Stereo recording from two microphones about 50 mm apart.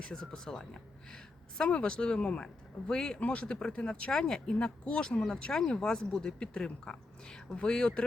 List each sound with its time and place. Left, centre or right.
0.0 s speech: centre